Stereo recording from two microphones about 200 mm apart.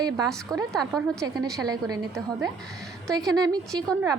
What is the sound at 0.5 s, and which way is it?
Speech, 20° right (ahead or behind).